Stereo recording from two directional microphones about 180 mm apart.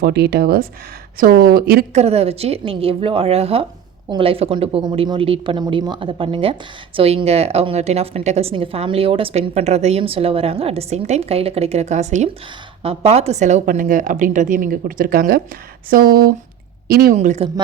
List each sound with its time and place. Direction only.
0.0 s a woman's voice: 65° right (ahead or behind)
1.9 s a woman's voice: 35° right (ahead or behind); by 17.2 s 55° right (ahead or behind)
17.2 s a woman's voice: 35° right (ahead or behind)